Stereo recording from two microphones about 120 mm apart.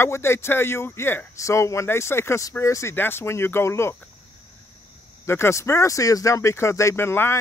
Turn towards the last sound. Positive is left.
turn(degrees=20)  # may be behind; listen again after turning